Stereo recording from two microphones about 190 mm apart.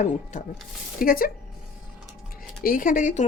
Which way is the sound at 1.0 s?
50° left (ahead or behind).